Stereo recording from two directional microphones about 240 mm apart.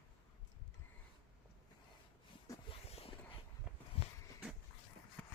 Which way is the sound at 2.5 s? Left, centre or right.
Left.